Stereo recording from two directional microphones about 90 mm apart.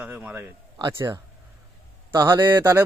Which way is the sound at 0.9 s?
30° right (ahead or behind).